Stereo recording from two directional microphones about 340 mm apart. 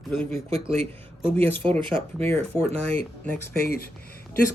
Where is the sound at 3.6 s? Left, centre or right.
Left.